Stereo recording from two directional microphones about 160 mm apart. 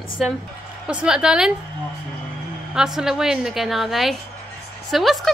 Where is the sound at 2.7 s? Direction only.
5° right (ahead or behind).